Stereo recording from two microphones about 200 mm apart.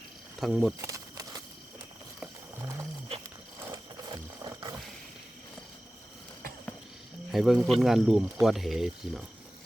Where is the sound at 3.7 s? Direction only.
20° right (ahead or behind).